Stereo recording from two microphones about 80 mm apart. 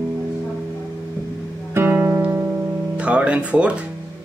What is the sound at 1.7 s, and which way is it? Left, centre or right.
Music, right.